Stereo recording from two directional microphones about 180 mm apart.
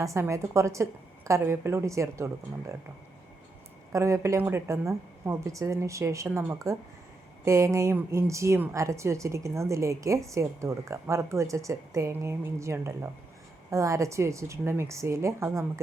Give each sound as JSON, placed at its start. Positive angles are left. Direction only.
{"t": 0.0, "sound": "a woman's voice", "side_deg": -15}
{"t": 3.9, "sound": "a woman's voice", "side_deg": -15}